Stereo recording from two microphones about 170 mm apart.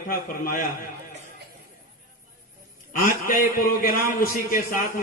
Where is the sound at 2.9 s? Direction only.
55° left (ahead or behind).